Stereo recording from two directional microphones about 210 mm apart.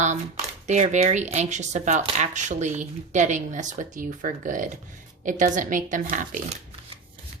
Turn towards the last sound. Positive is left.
turn(degrees=-35)  # may be behind; listen again after turning